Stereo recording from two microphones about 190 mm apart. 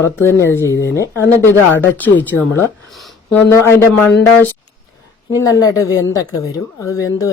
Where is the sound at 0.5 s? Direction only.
80° left.